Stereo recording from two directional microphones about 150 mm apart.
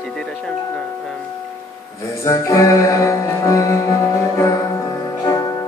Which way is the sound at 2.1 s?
20° left (ahead or behind).